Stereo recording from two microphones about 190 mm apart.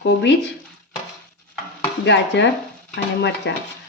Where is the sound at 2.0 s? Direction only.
70° left (ahead or behind).